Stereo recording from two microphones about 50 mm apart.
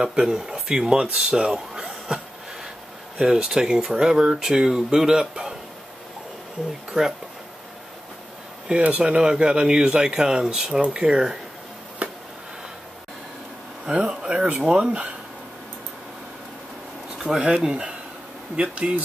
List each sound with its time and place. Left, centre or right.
0.0 s speech: centre
1.1 s speech: centre
6.9 s speech: centre
8.6 s speech: right
12.0 s a sound: right
13.8 s speech: centre
17.2 s a sound: centre
17.5 s speech: centre
18.6 s speech: right